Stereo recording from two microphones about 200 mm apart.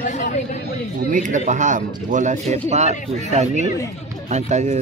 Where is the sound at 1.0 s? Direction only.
40° right (ahead or behind).